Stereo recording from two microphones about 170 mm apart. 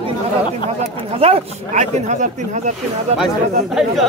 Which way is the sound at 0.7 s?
35° right (ahead or behind).